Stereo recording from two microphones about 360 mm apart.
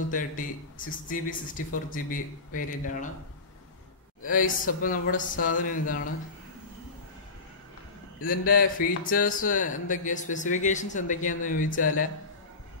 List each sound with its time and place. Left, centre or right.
0.1 s speech: left
4.2 s speech: left
8.2 s speech: left